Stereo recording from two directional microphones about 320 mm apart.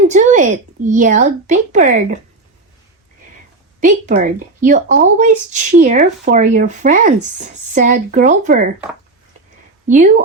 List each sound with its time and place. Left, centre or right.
0.1 s speech: right
3.8 s speech: right
9.8 s speech: right